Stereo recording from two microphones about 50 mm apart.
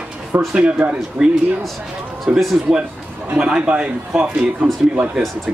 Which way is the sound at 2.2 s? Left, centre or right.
Centre.